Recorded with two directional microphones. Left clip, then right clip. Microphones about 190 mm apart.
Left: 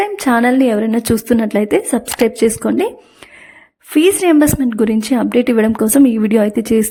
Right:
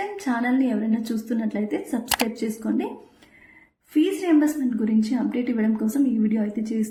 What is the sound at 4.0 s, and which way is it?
Speech, 65° left (ahead or behind).